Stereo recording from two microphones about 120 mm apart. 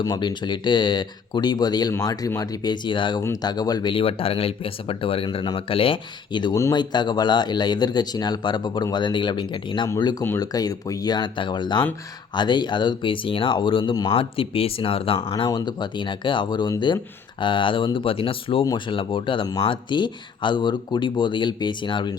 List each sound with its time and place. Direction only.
0.0 s speech: 35° left (ahead or behind)
3.9 s speech: 50° left (ahead or behind)
6.5 s speech: 25° left (ahead or behind)
6.7 s speech: 35° left (ahead or behind)
15.3 s speech: 35° left (ahead or behind)